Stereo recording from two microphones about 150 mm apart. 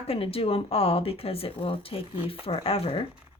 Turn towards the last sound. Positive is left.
turn(degrees=40)  # may be behind; listen again after turning